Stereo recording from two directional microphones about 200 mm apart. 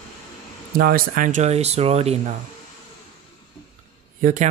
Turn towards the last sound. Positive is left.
turn(degrees=-40)  # may be behind; listen again after turning